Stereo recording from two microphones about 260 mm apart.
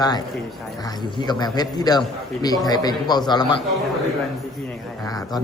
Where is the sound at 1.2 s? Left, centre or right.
Centre.